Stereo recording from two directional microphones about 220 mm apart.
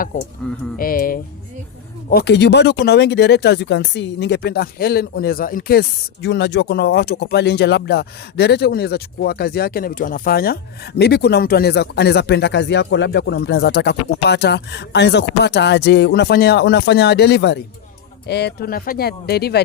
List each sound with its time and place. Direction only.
0.8 s speech: 40° left (ahead or behind)
6.2 s speech: 50° left (ahead or behind)